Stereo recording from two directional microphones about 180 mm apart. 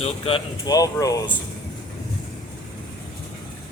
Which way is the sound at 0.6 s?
20° left (ahead or behind).